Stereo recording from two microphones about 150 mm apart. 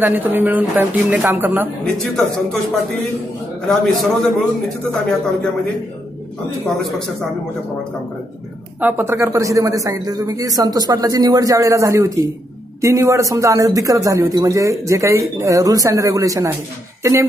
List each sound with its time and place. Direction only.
0.0 s speech: 15° right (ahead or behind)
3.6 s a man's voice: centre (ahead or behind)
6.6 s a man's voice: centre (ahead or behind)
8.8 s a man's voice: 15° right (ahead or behind)